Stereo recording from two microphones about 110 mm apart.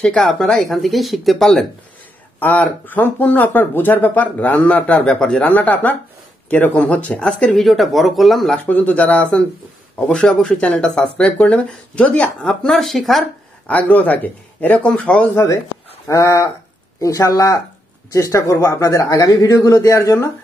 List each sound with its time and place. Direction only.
0.0 s speech: 5° left (ahead or behind)
2.4 s speech: 15° left (ahead or behind)
8.6 s speech: 15° left (ahead or behind)
13.7 s speech: 15° left (ahead or behind)
15.3 s speech: 30° left (ahead or behind)
16.1 s a sound: 30° left (ahead or behind)
17.0 s speech: 30° left (ahead or behind)